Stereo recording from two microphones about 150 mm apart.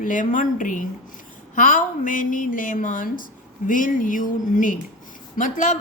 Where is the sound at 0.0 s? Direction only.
60° left (ahead or behind).